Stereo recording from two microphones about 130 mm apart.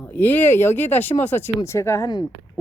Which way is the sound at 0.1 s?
15° left (ahead or behind).